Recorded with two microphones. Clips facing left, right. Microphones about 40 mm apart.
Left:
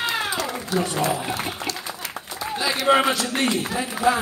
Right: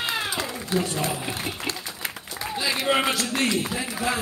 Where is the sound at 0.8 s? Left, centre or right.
Left.